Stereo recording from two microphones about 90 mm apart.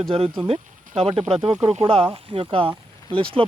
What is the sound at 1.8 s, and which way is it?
Speech, 90° right.